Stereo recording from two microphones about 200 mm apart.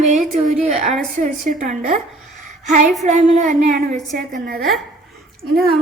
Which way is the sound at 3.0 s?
35° right (ahead or behind).